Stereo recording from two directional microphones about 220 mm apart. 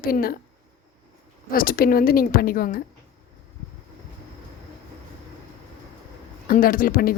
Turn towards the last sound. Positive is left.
turn(degrees=40)  # may be behind; listen again after turning